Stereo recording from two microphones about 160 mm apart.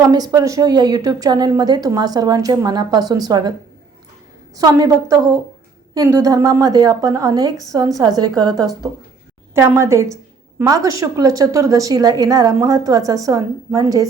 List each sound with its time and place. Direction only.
0.0 s a woman's voice: 25° right (ahead or behind)
4.5 s a woman's voice: 20° right (ahead or behind)